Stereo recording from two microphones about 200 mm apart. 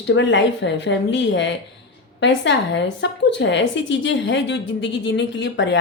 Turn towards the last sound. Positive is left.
turn(degrees=65)  # may be behind; listen again after turning